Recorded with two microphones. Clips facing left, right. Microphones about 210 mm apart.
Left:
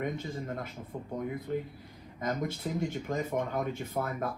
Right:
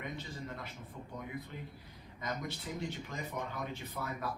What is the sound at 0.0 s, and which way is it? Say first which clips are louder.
Speech: left 8 dB; 50° left (ahead or behind).